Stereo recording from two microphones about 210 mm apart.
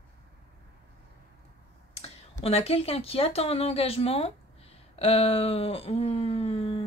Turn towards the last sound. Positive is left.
turn(degrees=25)  # may be behind; listen again after turning